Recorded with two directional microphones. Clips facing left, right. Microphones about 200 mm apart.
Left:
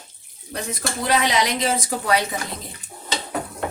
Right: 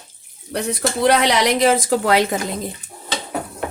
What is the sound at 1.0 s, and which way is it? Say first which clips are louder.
A woman's voice: right 5 dB; 70° right (ahead or behind).